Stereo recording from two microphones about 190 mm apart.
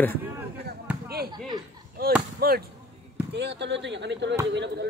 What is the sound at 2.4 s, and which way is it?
Speech, 55° right (ahead or behind).